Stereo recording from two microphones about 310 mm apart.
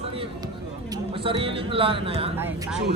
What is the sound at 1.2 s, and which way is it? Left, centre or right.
Speech, centre.